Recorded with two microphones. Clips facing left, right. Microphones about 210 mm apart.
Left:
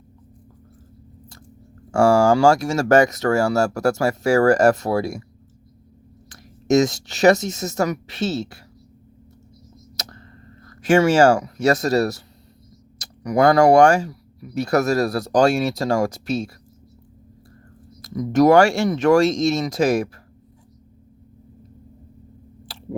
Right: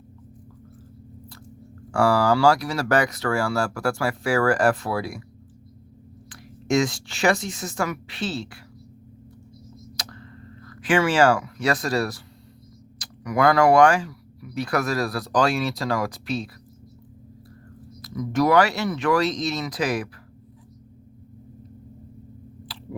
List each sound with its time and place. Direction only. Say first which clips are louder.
2.0 s speech: left 5 dB; 25° left (ahead or behind)
2.2 s speech: left 4 dB; 50° left (ahead or behind)
6.2 s speech: left 5 dB; 40° left (ahead or behind)
10.0 s a sound: left 3 dB; 45° left (ahead or behind)
13.0 s speech: left 4 dB; 40° left (ahead or behind)
15.8 s speech: left 5 dB; 25° left (ahead or behind)
16.0 s speech: left 4 dB; 45° left (ahead or behind)
18.0 s speech: left 6 dB; 45° left (ahead or behind)